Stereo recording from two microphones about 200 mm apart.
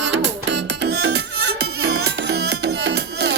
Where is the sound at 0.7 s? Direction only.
60° right (ahead or behind).